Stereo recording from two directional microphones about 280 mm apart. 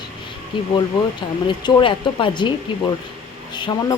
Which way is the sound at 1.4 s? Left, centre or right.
Centre.